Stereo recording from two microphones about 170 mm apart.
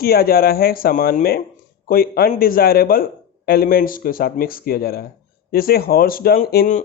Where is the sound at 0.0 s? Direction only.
65° left (ahead or behind).